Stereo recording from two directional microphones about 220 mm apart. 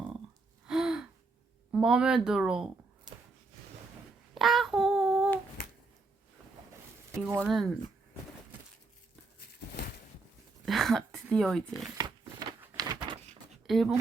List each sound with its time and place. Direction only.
0.7 s gasp: 5° right (ahead or behind)
1.7 s speech: 5° right (ahead or behind)
4.4 s child singing: centre (ahead or behind)
7.1 s speech: 10° right (ahead or behind)
10.7 s speech: centre (ahead or behind)
11.9 s a sound: 15° right (ahead or behind)
13.7 s speech: centre (ahead or behind)